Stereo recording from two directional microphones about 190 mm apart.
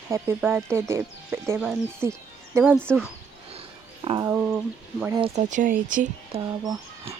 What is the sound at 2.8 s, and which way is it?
Speech, 5° left (ahead or behind).